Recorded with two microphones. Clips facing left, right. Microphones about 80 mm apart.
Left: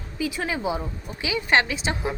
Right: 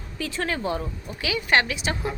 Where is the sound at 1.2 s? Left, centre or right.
Left.